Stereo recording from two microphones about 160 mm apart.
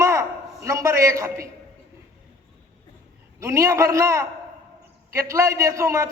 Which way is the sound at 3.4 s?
20° right (ahead or behind).